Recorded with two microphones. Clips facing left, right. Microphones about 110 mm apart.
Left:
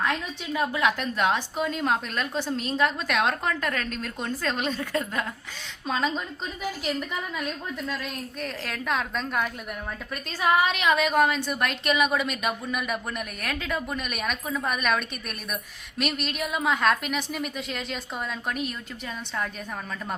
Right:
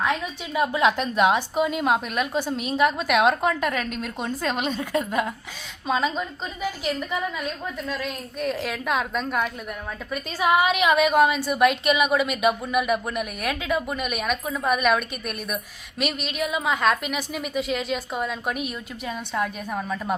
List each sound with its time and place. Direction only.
0.0 s a woman's voice: 15° right (ahead or behind)
5.9 s a woman's voice: 5° right (ahead or behind)